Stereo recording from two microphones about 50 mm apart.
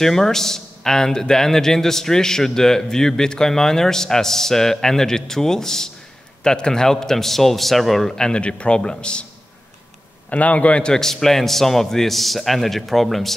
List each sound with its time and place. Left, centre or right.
0.0 s a man's voice: centre
8.2 s speech: centre
10.3 s a man's voice: left; by 13.3 s centre